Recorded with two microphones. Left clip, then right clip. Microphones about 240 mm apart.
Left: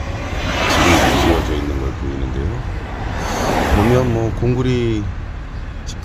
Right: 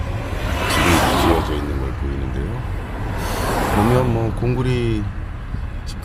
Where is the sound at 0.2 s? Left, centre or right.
Right.